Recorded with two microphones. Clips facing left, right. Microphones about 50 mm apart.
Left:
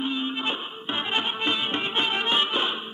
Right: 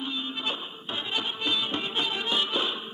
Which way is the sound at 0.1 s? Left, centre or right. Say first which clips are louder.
Left 4 dB; left.